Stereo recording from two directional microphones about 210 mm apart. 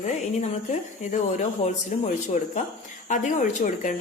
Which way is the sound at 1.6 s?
35° left (ahead or behind).